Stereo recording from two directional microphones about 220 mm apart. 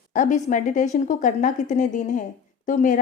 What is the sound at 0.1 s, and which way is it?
A woman's voice, 35° left (ahead or behind).